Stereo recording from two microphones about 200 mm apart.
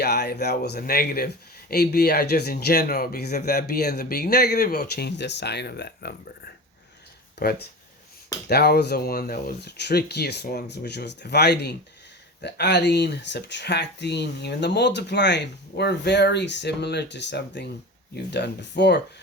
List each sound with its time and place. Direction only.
0.0 s speech: 55° left (ahead or behind)
7.4 s speech: 55° left (ahead or behind)